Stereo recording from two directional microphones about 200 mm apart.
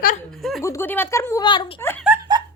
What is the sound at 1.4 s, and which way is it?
Speech, 25° left (ahead or behind).